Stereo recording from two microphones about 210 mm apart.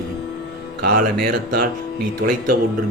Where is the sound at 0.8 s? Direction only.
40° right (ahead or behind).